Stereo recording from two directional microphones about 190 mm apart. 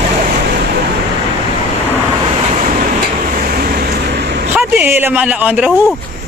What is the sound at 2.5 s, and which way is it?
Vehicle, 45° right (ahead or behind).